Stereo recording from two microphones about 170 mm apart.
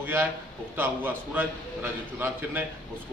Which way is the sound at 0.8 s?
10° right (ahead or behind).